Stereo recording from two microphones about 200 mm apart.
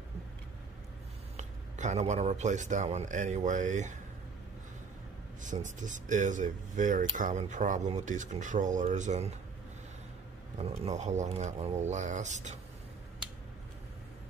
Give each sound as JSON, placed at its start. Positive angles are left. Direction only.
{"t": 1.3, "sound": "speech", "side_deg": -35}
{"t": 5.4, "sound": "speech", "side_deg": -40}
{"t": 10.6, "sound": "speech", "side_deg": -30}